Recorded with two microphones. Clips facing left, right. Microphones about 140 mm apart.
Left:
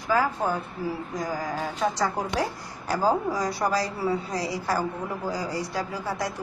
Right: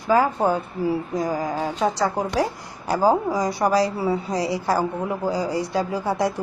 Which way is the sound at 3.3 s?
15° right (ahead or behind).